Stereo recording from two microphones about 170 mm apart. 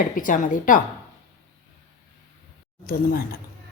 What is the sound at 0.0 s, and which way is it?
Speech, 50° left (ahead or behind).